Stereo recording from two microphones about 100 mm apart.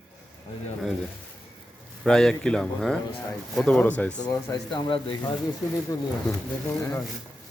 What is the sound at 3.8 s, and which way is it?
Speech, 15° left (ahead or behind).